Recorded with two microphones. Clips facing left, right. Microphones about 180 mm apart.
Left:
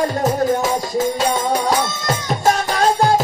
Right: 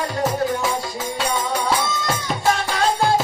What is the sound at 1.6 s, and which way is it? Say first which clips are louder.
Music: left 3 dB; 40° left (ahead or behind).